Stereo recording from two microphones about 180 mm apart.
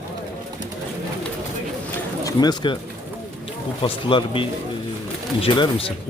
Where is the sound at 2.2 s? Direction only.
25° left (ahead or behind).